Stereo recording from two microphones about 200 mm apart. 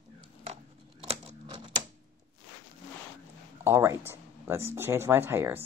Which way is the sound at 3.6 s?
15° right (ahead or behind).